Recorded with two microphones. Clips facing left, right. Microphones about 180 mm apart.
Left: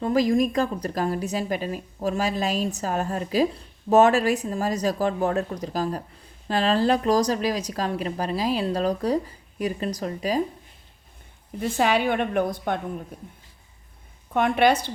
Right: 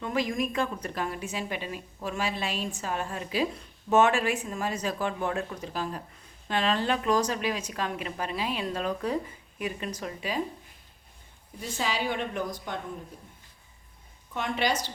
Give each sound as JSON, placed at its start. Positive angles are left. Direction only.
{"t": 0.0, "sound": "speech", "side_deg": 35}
{"t": 11.6, "sound": "a woman's voice", "side_deg": 60}
{"t": 14.3, "sound": "a woman's voice", "side_deg": 55}